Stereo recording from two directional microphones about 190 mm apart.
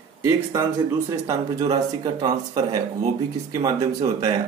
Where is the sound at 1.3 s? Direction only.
20° right (ahead or behind).